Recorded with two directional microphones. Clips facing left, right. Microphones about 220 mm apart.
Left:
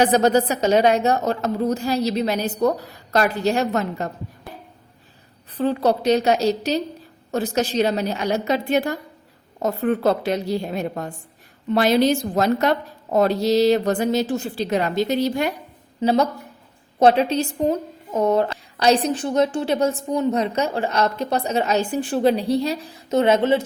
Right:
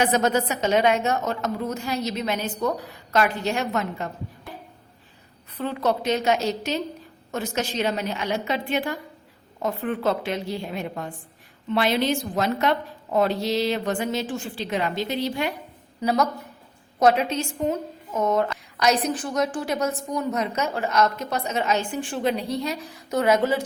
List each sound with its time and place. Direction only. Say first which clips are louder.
0.0 s a woman's voice: left 5 dB; 35° left (ahead or behind)
5.5 s a woman's voice: left 5 dB; 35° left (ahead or behind)
16.0 s a woman's voice: left 4 dB; 30° left (ahead or behind)